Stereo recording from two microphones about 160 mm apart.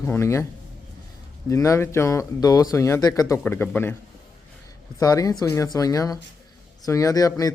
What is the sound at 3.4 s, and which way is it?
Speech, 10° left (ahead or behind).